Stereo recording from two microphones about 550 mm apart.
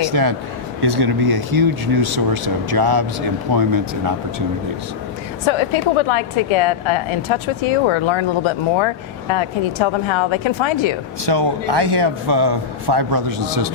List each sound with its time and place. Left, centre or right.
0.0 s speech: right
5.5 s a woman's voice: left
11.3 s speech: right